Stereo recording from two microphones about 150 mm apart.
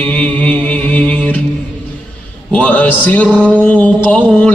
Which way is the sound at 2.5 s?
10° left (ahead or behind).